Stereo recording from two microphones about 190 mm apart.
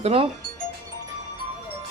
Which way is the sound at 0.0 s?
30° right (ahead or behind).